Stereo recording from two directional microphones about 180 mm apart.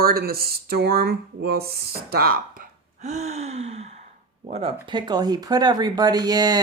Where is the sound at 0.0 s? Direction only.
55° right (ahead or behind).